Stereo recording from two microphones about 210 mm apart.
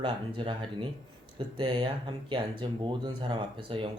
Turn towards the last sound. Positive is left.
turn(degrees=-25)  # may be behind; listen again after turning